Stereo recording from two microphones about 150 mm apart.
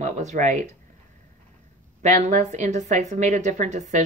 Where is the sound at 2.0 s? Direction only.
50° right (ahead or behind).